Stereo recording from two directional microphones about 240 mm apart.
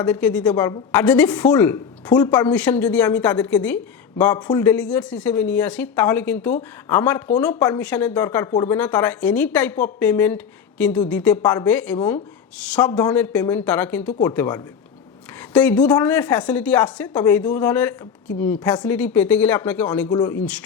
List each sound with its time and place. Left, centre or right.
0.0 s a woman's voice: centre